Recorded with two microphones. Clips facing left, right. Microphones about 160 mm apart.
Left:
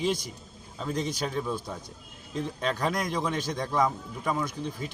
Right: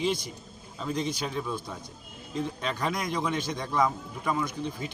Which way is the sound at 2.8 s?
35° left (ahead or behind).